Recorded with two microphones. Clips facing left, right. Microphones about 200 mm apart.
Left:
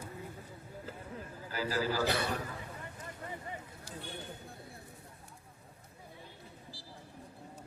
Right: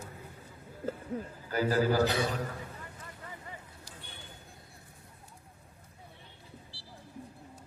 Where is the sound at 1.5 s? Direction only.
50° right (ahead or behind).